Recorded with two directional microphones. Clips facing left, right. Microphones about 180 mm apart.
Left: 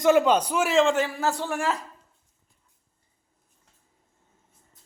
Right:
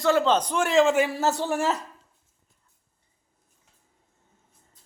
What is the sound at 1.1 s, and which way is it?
Speech, 25° right (ahead or behind).